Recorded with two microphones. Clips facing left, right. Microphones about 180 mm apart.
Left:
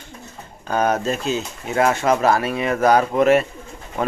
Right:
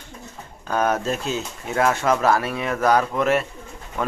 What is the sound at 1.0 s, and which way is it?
Speech, 5° right (ahead or behind).